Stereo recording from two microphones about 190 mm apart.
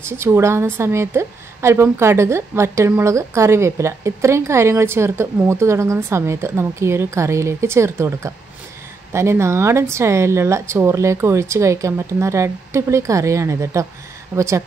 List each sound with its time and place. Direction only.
0.2 s a woman's voice: 15° right (ahead or behind)